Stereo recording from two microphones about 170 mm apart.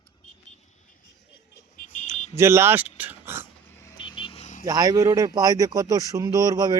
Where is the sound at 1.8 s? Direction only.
45° left (ahead or behind).